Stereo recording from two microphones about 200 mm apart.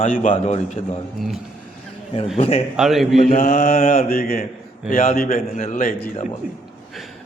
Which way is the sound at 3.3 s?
45° left (ahead or behind).